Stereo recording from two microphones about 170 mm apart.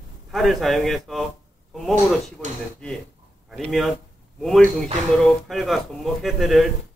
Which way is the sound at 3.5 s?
Centre (ahead or behind).